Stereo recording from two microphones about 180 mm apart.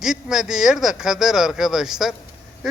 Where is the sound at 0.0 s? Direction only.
5° right (ahead or behind).